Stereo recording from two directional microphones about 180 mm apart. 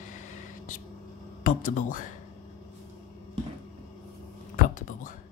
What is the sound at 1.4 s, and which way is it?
Speech, 45° left (ahead or behind).